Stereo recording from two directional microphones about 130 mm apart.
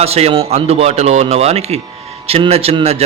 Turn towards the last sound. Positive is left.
turn(degrees=-50)  # may be behind; listen again after turning